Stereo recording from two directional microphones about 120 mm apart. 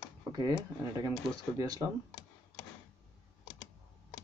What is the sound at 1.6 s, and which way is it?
Speech, 30° right (ahead or behind).